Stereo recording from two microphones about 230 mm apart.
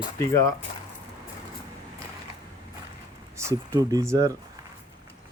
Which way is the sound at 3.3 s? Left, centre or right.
Centre.